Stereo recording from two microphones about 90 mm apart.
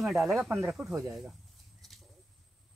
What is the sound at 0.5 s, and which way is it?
Speech, 25° right (ahead or behind).